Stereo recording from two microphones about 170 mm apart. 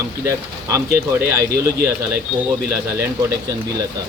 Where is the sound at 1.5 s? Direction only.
65° right (ahead or behind).